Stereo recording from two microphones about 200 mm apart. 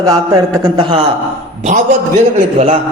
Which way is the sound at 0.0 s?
20° right (ahead or behind).